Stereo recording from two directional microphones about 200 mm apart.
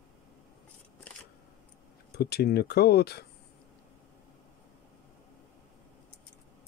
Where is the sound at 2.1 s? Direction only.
55° left (ahead or behind).